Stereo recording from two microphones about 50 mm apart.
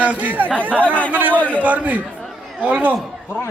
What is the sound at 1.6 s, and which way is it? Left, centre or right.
A man's voice, right.